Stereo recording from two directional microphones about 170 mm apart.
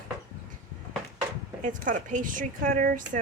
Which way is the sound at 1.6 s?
50° right (ahead or behind).